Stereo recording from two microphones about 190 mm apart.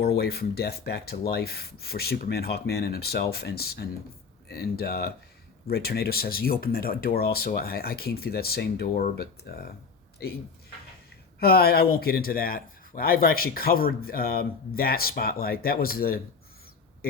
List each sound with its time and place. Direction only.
0.0 s a man's voice: 55° left (ahead or behind)
11.3 s a man's voice: 55° left (ahead or behind)